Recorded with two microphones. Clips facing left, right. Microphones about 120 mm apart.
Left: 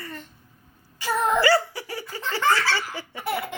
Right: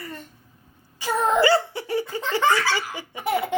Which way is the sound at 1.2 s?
20° right (ahead or behind).